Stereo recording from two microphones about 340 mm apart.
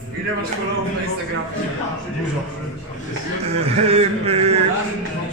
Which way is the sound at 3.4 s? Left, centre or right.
Centre.